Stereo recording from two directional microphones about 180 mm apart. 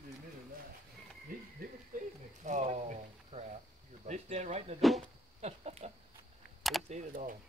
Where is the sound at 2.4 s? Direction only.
40° right (ahead or behind).